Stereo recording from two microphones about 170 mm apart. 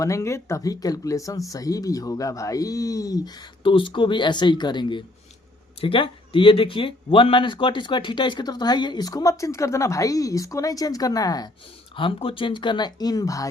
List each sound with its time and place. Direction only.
0.0 s speech: 15° left (ahead or behind)